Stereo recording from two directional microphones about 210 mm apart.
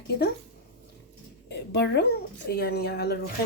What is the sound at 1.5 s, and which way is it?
A woman's voice, 55° left (ahead or behind).